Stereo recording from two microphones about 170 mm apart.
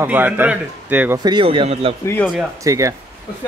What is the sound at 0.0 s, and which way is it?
Speech, 10° right (ahead or behind).